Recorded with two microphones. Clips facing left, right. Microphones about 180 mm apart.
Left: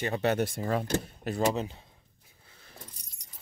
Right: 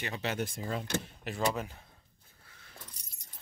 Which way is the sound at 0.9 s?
40° left (ahead or behind).